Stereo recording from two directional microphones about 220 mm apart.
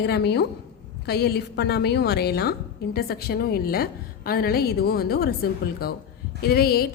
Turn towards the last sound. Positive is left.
turn(degrees=45)  # may be behind; listen again after turning